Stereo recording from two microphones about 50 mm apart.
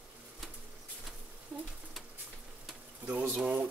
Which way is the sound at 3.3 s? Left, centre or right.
Right.